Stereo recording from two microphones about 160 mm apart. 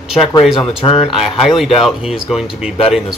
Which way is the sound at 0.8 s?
35° left (ahead or behind).